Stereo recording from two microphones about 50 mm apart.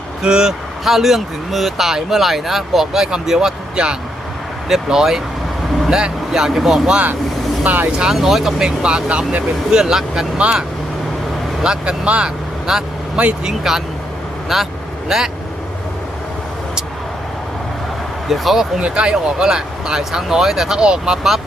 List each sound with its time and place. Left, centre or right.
0.2 s speech: centre
0.9 s speech: centre
7.6 s speech: right
8.1 s speech: centre; by 9.8 s right
9.8 s speech: centre
11.6 s speech: centre
12.7 s speech: centre
18.3 s speech: centre
18.8 s speech: right